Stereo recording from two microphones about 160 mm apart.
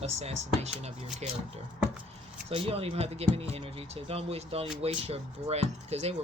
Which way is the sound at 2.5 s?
35° right (ahead or behind).